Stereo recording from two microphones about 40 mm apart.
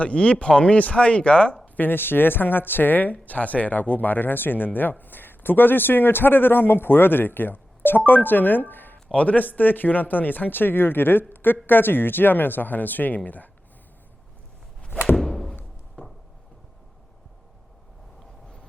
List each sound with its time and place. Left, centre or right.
0.0 s speech: left
1.6 s a sound: left
1.9 s speech: left
9.1 s speech: left
15.1 s thunk: centre
16.0 s a sound: left